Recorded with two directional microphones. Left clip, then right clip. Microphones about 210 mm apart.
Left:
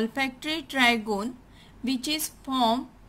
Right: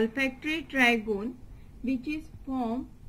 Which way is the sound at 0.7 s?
55° left (ahead or behind).